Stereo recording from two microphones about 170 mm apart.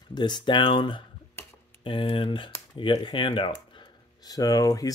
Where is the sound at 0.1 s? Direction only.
25° left (ahead or behind).